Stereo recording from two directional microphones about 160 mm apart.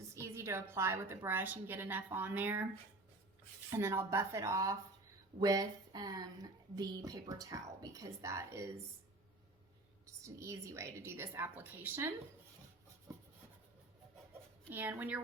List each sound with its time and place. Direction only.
0.1 s a woman's voice: 20° right (ahead or behind)
3.7 s a woman's voice: 15° right (ahead or behind)
10.1 s a woman's voice: 20° right (ahead or behind)
14.7 s a woman's voice: 10° right (ahead or behind)